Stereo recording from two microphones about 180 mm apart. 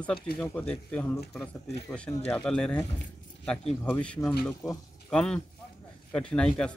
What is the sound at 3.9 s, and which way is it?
Speech, 5° left (ahead or behind).